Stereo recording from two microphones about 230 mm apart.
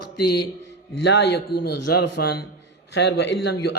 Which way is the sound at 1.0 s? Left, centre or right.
Left.